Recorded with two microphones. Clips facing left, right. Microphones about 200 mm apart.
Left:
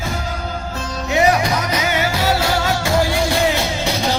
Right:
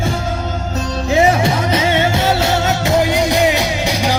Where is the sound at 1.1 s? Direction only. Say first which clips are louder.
Right 2 dB; 25° right (ahead or behind).